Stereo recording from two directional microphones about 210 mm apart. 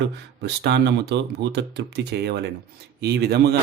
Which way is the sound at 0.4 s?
55° right (ahead or behind).